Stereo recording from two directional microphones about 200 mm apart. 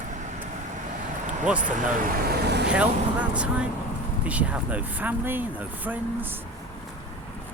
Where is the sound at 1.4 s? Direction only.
5° right (ahead or behind).